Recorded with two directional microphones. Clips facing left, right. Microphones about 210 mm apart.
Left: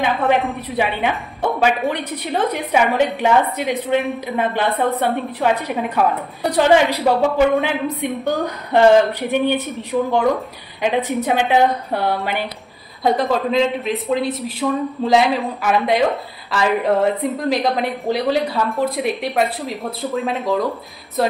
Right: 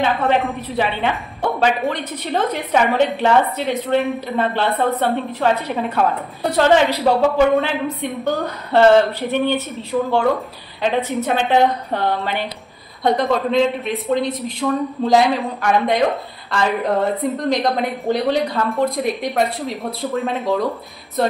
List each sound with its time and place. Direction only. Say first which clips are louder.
0.0 s a woman's voice: even; 15° left (ahead or behind)